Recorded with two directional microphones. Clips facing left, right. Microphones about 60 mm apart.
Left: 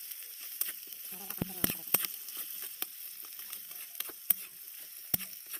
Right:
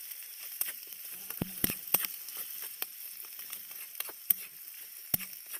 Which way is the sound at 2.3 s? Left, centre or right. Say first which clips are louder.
Right 1 dB; centre.